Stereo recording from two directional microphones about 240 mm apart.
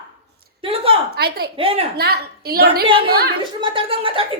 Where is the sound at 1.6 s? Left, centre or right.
Right.